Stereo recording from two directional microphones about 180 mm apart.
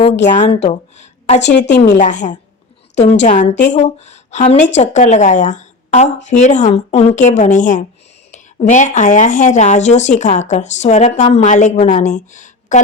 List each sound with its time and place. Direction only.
0.6 s a woman's voice: 40° left (ahead or behind)
1.4 s a woman's voice: 70° left (ahead or behind)
2.0 s a woman's voice: 45° left (ahead or behind)